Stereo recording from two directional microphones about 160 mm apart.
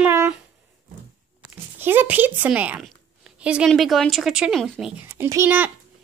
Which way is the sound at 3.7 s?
Centre (ahead or behind).